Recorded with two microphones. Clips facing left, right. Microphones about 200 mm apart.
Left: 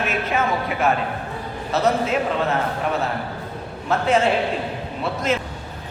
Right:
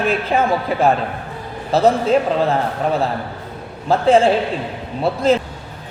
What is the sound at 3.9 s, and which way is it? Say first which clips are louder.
A woman's voice: right 6 dB; 30° right (ahead or behind).